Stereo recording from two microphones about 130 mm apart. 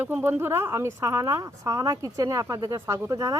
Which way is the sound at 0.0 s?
15° right (ahead or behind).